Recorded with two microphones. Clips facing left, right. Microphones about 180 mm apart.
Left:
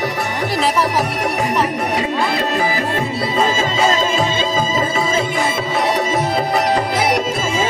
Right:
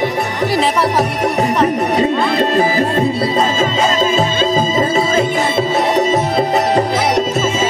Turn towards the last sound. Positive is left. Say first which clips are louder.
# right 3 dB
turn(degrees=-30)  # may be behind; listen again after turning